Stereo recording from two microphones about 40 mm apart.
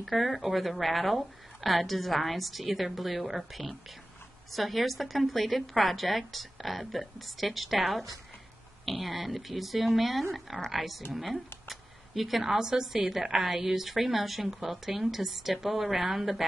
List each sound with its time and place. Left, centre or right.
0.0 s a woman's voice: centre